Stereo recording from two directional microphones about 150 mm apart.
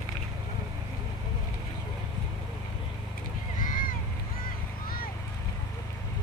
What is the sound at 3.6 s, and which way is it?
Boat, 60° left (ahead or behind).